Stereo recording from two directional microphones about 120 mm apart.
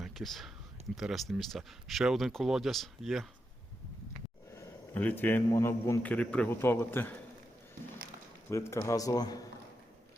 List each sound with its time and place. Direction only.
0.0 s speech: centre (ahead or behind)
4.5 s a sound: 15° left (ahead or behind)
5.5 s a man's voice: 25° left (ahead or behind)
8.4 s a man's voice: 20° left (ahead or behind)